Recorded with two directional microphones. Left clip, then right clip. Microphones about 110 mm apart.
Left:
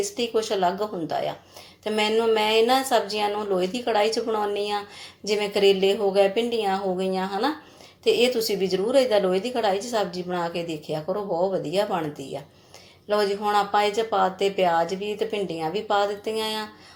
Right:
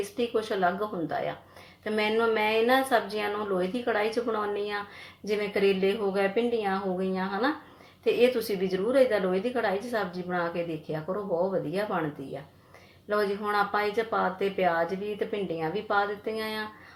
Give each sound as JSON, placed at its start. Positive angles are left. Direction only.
{"t": 0.2, "sound": "a woman's voice", "side_deg": 20}
{"t": 13.1, "sound": "a woman's voice", "side_deg": 20}